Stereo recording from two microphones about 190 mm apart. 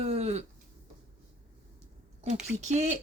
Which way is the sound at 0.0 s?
35° right (ahead or behind).